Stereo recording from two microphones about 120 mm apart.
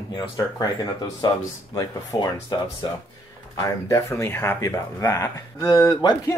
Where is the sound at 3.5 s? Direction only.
25° left (ahead or behind).